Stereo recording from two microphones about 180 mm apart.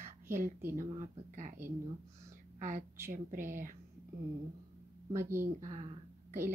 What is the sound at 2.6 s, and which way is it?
Speech, 45° right (ahead or behind).